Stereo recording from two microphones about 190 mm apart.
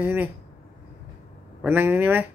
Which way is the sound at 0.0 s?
10° right (ahead or behind).